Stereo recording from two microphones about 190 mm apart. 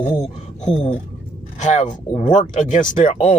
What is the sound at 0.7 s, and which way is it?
Speech, 35° left (ahead or behind).